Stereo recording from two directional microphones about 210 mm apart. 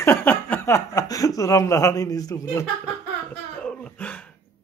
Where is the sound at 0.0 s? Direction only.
10° left (ahead or behind).